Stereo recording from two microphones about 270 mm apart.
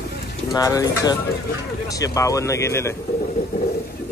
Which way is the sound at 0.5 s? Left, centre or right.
Centre.